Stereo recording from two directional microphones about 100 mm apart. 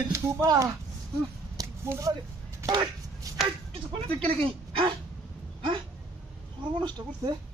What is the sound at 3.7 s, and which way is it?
Speech, 65° right (ahead or behind).